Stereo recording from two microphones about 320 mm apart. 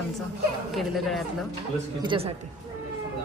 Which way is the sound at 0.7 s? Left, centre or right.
Centre.